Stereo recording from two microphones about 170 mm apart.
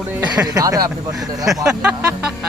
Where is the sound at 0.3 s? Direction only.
20° right (ahead or behind).